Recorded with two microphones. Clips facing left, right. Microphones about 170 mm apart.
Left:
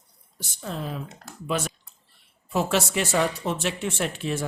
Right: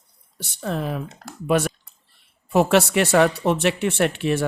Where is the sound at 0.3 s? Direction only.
65° right (ahead or behind).